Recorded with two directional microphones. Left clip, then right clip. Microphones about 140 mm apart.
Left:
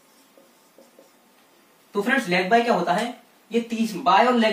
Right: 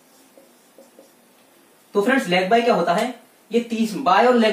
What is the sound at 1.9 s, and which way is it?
Speech, 20° right (ahead or behind).